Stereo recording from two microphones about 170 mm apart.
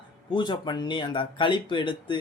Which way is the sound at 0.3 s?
25° left (ahead or behind).